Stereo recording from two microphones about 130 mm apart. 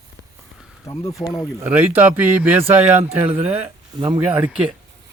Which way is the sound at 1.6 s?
15° right (ahead or behind).